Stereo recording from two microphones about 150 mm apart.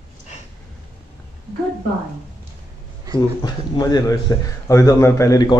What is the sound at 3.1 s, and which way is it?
A man's voice, 25° left (ahead or behind).